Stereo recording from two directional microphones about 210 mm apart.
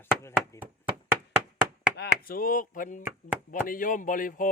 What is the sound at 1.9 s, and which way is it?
Chopping, 45° left (ahead or behind).